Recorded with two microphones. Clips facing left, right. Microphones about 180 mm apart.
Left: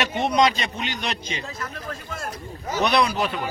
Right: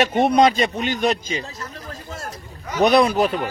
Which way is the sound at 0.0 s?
50° right (ahead or behind).